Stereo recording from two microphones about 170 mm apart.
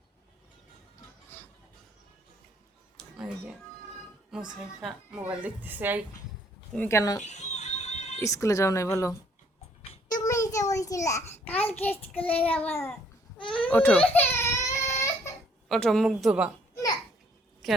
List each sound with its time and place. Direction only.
1.3 s a sound: 10° left (ahead or behind)
3.0 s a sound: 5° right (ahead or behind)
4.3 s a woman's voice: 5° right (ahead or behind)
6.7 s child singing: 15° left (ahead or behind)
7.2 s music: 45° left (ahead or behind)
8.2 s speech: 20° left (ahead or behind)
10.1 s a sound: 20° left (ahead or behind)
12.1 s child singing: 10° left (ahead or behind)
14.1 s crying: 10° left (ahead or behind)
15.7 s speech: 5° left (ahead or behind)
16.7 s a sound: 20° left (ahead or behind)
17.6 s a woman's voice: centre (ahead or behind)